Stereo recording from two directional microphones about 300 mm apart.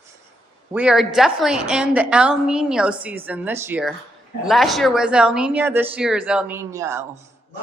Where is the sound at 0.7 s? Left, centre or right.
Centre.